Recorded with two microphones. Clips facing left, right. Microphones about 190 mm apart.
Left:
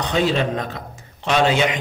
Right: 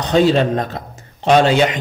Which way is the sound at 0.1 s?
35° right (ahead or behind).